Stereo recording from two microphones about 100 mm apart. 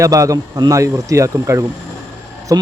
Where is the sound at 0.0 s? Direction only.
35° right (ahead or behind).